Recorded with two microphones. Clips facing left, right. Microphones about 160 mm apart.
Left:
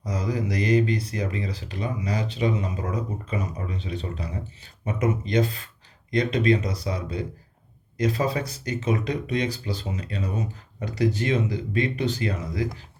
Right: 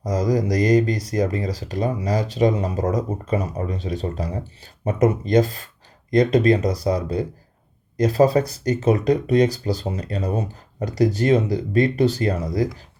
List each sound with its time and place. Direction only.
0.0 s speech: 40° right (ahead or behind)